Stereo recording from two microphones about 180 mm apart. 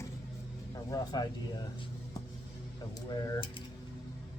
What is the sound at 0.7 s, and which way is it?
Speech, 20° left (ahead or behind).